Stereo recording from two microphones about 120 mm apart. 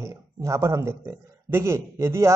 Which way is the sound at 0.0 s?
25° right (ahead or behind).